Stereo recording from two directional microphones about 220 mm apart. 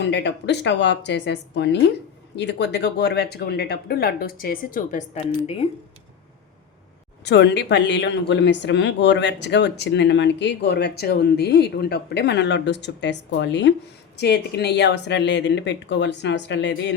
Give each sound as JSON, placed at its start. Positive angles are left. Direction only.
{"t": 0.0, "sound": "speech", "side_deg": 50}
{"t": 7.3, "sound": "speech", "side_deg": 50}